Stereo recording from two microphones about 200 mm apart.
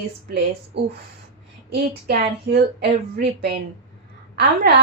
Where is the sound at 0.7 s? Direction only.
55° right (ahead or behind).